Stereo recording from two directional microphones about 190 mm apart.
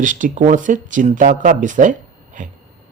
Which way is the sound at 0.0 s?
40° right (ahead or behind).